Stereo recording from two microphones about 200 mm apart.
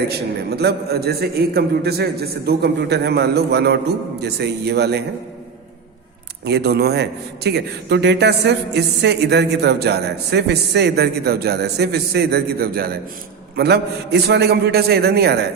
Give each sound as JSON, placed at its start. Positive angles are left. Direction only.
{"t": 0.1, "sound": "a man's voice", "side_deg": -55}
{"t": 6.4, "sound": "a man's voice", "side_deg": -55}